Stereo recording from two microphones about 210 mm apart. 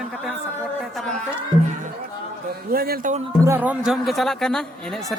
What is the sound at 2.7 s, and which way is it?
Speech, 45° right (ahead or behind).